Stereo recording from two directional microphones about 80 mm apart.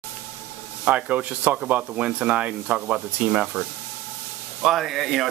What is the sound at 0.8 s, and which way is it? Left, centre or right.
Speech, centre.